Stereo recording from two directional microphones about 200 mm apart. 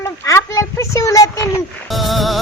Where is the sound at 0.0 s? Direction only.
15° left (ahead or behind).